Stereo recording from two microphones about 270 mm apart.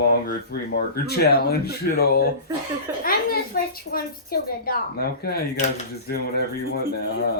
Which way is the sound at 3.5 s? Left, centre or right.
Left.